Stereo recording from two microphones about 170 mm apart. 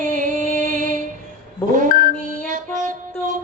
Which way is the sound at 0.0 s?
50° right (ahead or behind).